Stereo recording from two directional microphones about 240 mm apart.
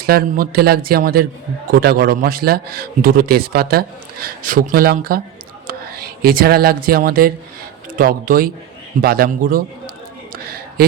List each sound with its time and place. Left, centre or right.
0.0 s a man's voice: right